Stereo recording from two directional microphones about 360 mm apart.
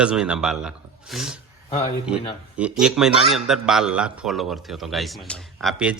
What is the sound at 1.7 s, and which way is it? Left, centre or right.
Speech, centre.